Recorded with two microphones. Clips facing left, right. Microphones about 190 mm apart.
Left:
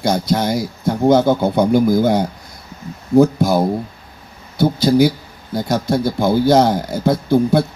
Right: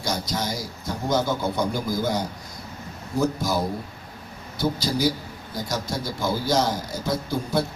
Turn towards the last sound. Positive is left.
turn(degrees=60)  # may be behind; listen again after turning